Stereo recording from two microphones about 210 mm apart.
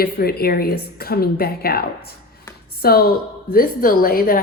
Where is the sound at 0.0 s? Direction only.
45° left (ahead or behind).